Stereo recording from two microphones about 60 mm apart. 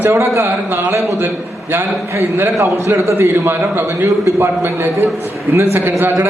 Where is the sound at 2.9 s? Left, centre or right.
Right.